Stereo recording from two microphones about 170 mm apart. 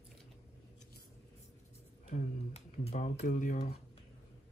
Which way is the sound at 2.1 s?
40° left (ahead or behind).